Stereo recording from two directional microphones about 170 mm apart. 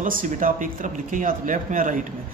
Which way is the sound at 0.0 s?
50° right (ahead or behind).